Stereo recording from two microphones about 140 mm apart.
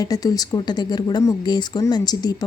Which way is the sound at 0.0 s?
25° left (ahead or behind).